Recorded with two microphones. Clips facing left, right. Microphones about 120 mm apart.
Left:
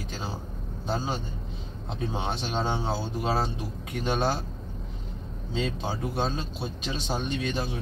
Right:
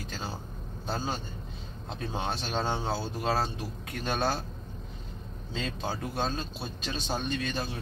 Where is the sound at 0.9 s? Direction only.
15° left (ahead or behind).